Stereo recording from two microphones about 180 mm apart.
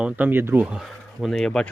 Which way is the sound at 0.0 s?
10° right (ahead or behind).